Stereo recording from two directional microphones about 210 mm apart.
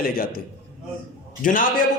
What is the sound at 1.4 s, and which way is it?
Speech, 40° left (ahead or behind).